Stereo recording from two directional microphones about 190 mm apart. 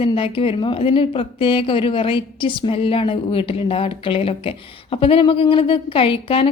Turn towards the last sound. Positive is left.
turn(degrees=30)  # may be behind; listen again after turning